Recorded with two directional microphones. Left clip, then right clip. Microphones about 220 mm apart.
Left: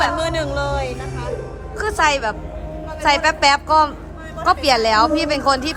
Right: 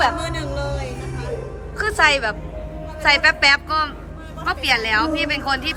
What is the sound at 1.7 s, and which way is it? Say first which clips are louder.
A woman's voice: right 1 dB; 10° left (ahead or behind).